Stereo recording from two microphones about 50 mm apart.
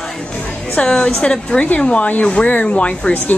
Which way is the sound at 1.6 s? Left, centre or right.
Left.